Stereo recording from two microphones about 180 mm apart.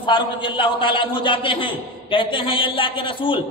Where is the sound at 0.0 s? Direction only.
30° left (ahead or behind).